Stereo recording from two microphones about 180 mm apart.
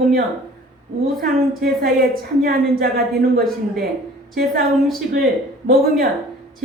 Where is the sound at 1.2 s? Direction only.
55° right (ahead or behind).